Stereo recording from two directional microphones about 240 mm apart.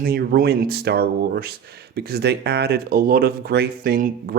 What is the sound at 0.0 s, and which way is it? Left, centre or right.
Speech, right.